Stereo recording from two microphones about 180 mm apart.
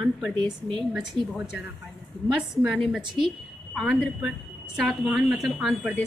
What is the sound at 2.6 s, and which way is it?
A woman's voice, 5° right (ahead or behind).